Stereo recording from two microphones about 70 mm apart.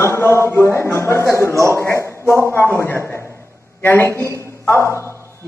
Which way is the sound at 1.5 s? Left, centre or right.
Right.